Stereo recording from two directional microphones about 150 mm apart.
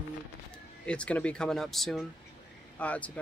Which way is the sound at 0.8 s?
10° left (ahead or behind).